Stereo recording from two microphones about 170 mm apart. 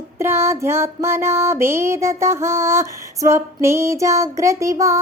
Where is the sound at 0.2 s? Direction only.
15° right (ahead or behind).